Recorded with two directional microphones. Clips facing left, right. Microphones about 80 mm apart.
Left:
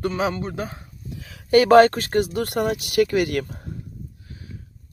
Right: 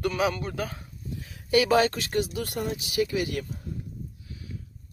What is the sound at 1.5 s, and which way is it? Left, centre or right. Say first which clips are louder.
Speech: left 9 dB; left.